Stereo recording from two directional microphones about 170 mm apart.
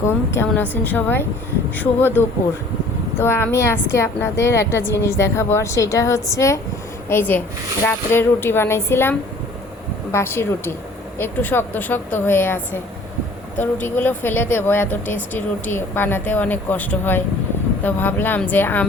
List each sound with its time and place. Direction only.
0.3 s speech: 10° left (ahead or behind)